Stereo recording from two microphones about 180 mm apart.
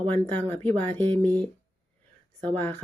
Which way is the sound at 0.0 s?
10° left (ahead or behind).